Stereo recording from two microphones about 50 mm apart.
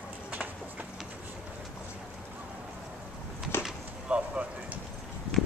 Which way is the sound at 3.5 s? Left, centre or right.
Left.